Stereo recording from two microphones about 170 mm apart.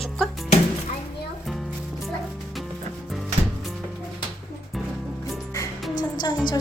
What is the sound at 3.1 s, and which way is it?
Music, centre (ahead or behind).